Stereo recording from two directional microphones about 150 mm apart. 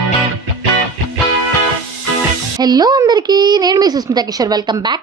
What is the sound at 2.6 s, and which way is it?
A woman's voice, 25° right (ahead or behind).